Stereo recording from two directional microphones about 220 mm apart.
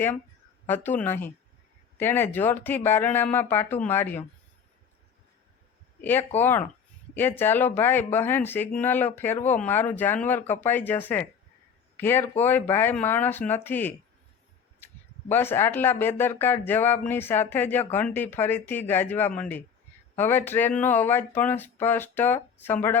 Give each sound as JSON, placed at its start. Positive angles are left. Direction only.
{"t": 0.7, "sound": "speech", "side_deg": 10}
{"t": 6.0, "sound": "speech", "side_deg": 10}
{"t": 15.3, "sound": "speech", "side_deg": 10}